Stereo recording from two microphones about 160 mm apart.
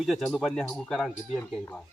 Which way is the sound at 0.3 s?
Centre (ahead or behind).